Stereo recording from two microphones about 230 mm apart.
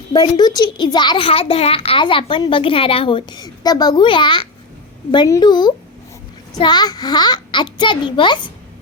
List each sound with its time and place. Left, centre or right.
0.1 s a child's voice: centre